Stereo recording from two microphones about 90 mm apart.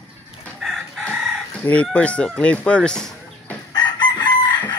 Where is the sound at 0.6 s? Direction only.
5° right (ahead or behind).